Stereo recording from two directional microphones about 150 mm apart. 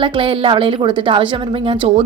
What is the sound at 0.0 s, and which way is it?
A woman's voice, 35° right (ahead or behind).